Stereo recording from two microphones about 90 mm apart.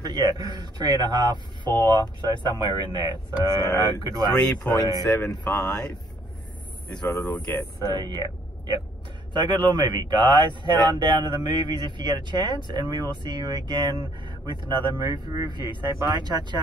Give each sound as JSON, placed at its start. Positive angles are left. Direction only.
{"t": 0.0, "sound": "speech", "side_deg": -50}
{"t": 3.3, "sound": "speech", "side_deg": 55}
{"t": 4.3, "sound": "speech", "side_deg": 5}
{"t": 7.9, "sound": "speech", "side_deg": -50}